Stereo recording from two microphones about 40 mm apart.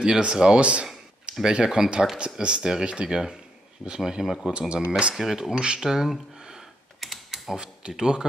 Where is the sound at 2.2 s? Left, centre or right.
Right.